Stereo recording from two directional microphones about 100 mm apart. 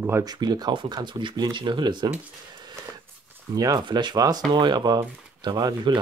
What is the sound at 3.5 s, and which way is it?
Speech, 40° right (ahead or behind).